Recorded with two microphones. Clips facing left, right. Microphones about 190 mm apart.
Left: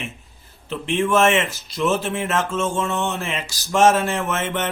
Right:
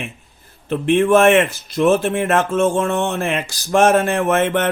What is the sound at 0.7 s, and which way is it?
A man's voice, 55° right (ahead or behind).